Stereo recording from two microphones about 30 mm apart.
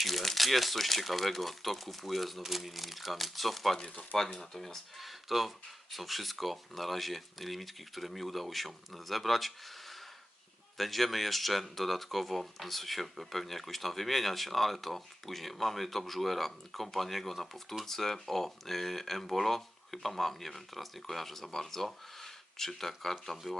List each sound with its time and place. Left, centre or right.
0.0 s speech: centre
4.9 s speech: centre
22.2 s a sound: centre
23.3 s speech: centre